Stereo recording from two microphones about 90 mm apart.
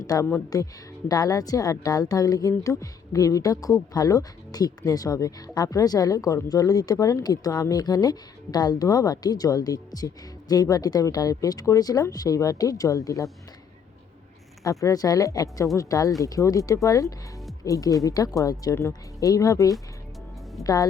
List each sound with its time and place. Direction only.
0.0 s speech: 45° left (ahead or behind)
14.6 s a woman's voice: 40° left (ahead or behind)
18.7 s a woman's voice: 30° left (ahead or behind)